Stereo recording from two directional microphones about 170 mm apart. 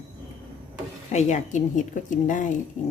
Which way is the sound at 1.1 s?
45° left (ahead or behind).